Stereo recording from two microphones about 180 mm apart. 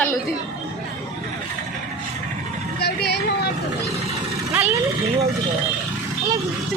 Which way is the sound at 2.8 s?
65° left (ahead or behind).